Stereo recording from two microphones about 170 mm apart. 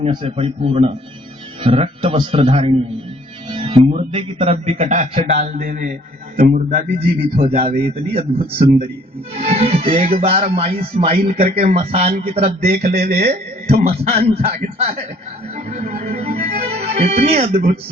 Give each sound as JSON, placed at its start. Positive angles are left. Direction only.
{"t": 0.0, "sound": "speech", "side_deg": -35}
{"t": 12.5, "sound": "speech", "side_deg": -55}
{"t": 13.0, "sound": "speech", "side_deg": -40}